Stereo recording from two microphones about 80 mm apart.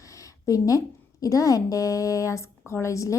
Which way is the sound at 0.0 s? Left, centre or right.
Left.